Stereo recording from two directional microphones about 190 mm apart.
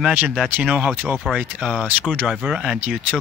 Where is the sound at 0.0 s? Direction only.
5° right (ahead or behind).